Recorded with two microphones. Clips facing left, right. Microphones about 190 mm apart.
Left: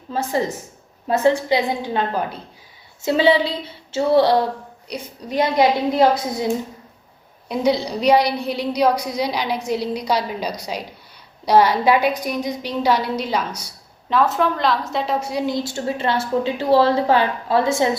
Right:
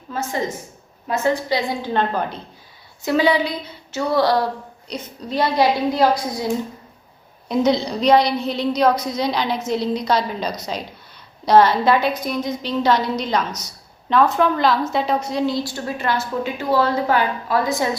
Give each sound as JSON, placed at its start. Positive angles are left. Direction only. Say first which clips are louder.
{"t": 0.1, "sound": "a woman's voice", "louder": "left 3 dB", "side_deg": 35}
{"t": 1.9, "sound": "a woman's voice", "louder": "right 1 dB", "side_deg": 10}
{"t": 3.0, "sound": "a woman's voice", "louder": "left 1 dB", "side_deg": 25}
{"t": 4.9, "sound": "a woman's voice", "louder": "even", "side_deg": 15}
{"t": 7.4, "sound": "a woman's voice", "louder": "right 1 dB", "side_deg": 10}